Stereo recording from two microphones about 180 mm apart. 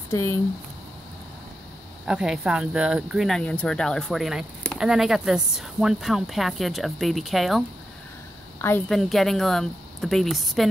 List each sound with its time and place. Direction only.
0.1 s speech: 15° left (ahead or behind)
2.0 s speech: 5° right (ahead or behind)
8.5 s a woman's voice: 15° left (ahead or behind)
8.8 s speech: centre (ahead or behind)